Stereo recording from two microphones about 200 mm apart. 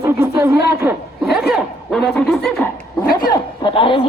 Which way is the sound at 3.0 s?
45° left (ahead or behind).